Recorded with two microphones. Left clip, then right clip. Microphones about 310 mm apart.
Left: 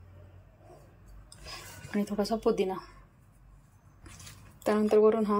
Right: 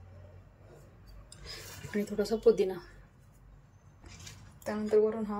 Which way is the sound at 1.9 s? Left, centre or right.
Centre.